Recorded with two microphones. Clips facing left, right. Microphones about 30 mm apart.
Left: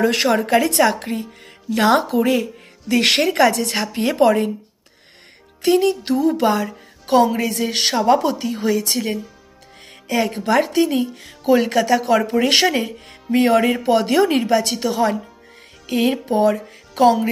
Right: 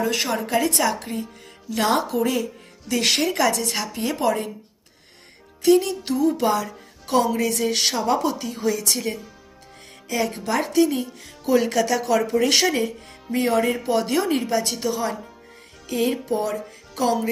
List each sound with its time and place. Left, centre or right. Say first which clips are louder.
0.0 s a woman's voice: left 6 dB; left
1.2 s speech: left 4 dB; left
2.1 s music: left 5 dB; left
2.9 s speech: left 5 dB; left
3.3 s music: left 5 dB; left
5.6 s speech: left 2 dB; left
7.4 s music: left 2 dB; left
8.0 s speech: left 6 dB; left
10.0 s music: left 5 dB; left
11.4 s speech: left 4 dB; left
11.8 s music: left 4 dB; left
12.1 s speech: left 3 dB; left
13.3 s a woman's voice: left 5 dB; left
13.8 s music: left 6 dB; left